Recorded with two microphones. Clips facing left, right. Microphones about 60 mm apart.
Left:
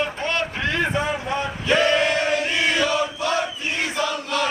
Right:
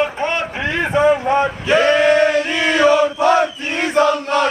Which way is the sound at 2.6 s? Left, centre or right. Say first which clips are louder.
Right 11 dB; right.